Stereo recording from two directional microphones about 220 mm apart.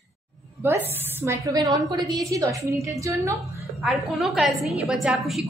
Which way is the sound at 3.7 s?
Centre (ahead or behind).